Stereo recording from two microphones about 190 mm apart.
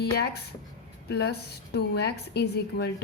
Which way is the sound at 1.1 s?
60° left (ahead or behind).